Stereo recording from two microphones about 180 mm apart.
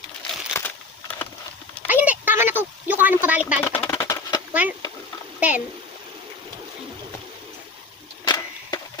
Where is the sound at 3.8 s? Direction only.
15° left (ahead or behind).